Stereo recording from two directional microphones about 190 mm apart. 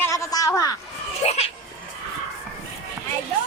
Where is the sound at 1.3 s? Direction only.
35° left (ahead or behind).